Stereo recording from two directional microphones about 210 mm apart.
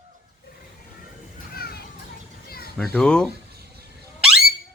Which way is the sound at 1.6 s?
45° left (ahead or behind).